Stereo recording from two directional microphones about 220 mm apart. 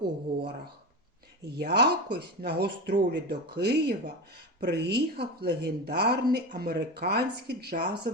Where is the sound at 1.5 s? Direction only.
50° right (ahead or behind).